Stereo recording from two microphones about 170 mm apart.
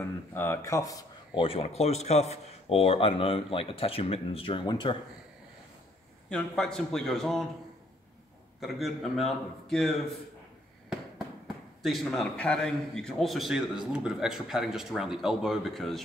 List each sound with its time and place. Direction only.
0.0 s speech: 10° left (ahead or behind)
1.4 s speech: 35° left (ahead or behind)
6.2 s speech: 5° left (ahead or behind)
8.5 s speech: centre (ahead or behind)
10.9 s speech: centre (ahead or behind)